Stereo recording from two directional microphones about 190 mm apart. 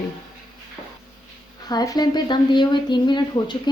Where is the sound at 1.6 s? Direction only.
20° left (ahead or behind).